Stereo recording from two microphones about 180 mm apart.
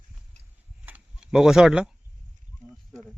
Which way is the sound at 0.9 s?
5° right (ahead or behind).